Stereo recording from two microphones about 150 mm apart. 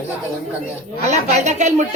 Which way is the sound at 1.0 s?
50° right (ahead or behind).